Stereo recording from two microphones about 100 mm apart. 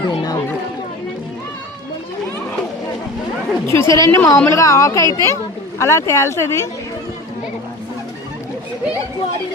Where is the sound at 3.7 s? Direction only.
30° left (ahead or behind).